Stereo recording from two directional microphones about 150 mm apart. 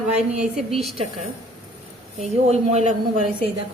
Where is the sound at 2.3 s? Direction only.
45° right (ahead or behind).